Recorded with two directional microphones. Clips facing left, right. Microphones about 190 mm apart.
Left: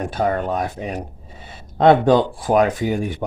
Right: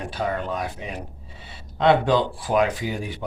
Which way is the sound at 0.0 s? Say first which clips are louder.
Left 6 dB; 50° left (ahead or behind).